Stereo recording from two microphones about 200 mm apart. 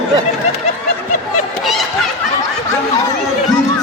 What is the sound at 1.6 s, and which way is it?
Snicker, centre (ahead or behind).